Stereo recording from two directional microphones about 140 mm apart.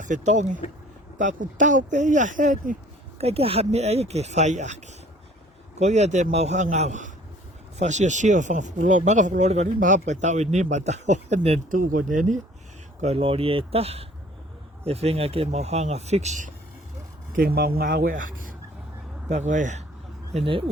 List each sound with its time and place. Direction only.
0.0 s speech: 60° right (ahead or behind)
3.2 s speech: 45° right (ahead or behind)
5.8 s speech: 55° right (ahead or behind)
11.7 s speech: 75° right (ahead or behind)
13.0 s speech: 45° right (ahead or behind)
17.3 s speech: 90° right; by 18.5 s 75° right (ahead or behind)
19.3 s speech: 60° right (ahead or behind)
20.3 s speech: 40° right (ahead or behind)